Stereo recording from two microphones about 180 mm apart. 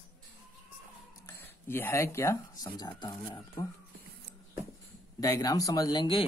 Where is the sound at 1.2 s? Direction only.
15° left (ahead or behind).